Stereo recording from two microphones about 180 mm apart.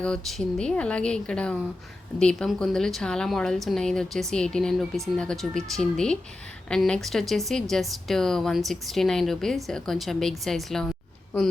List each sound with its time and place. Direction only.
0.0 s speech: 5° left (ahead or behind)